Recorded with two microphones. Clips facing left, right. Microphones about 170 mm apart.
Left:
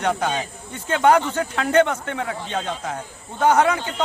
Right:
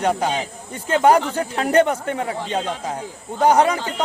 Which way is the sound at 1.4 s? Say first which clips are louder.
Right 1 dB; 30° right (ahead or behind).